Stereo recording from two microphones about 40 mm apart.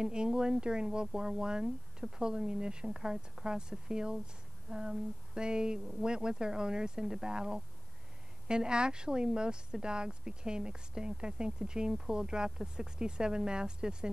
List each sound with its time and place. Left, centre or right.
0.0 s speech: right